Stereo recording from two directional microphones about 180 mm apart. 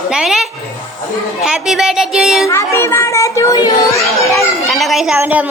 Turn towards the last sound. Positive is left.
turn(degrees=-10)  # may be behind; listen again after turning